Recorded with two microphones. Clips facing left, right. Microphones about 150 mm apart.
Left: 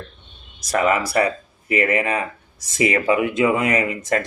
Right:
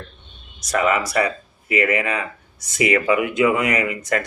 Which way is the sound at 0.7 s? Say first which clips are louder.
Left 1 dB; 30° left (ahead or behind).